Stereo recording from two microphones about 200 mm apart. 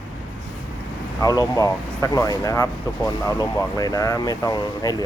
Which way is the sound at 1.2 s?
20° left (ahead or behind).